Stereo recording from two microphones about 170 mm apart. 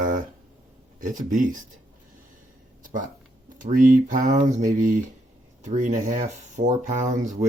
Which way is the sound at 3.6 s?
50° right (ahead or behind).